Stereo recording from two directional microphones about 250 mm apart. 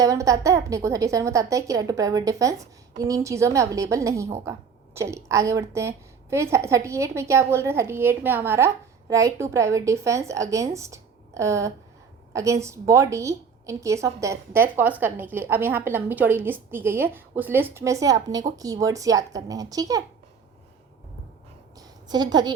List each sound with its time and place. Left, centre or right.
0.0 s a woman's voice: centre
21.8 s a woman's voice: centre